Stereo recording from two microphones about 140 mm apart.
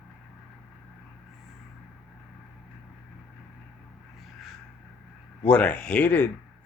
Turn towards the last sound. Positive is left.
turn(degrees=10)  # may be behind; listen again after turning